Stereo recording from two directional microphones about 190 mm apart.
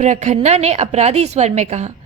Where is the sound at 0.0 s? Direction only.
40° right (ahead or behind).